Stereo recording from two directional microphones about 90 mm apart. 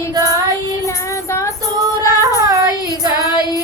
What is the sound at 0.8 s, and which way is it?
Child singing, 35° left (ahead or behind).